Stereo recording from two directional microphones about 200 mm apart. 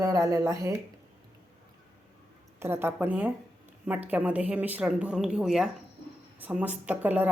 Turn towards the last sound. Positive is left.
turn(degrees=-10)  # may be behind; listen again after turning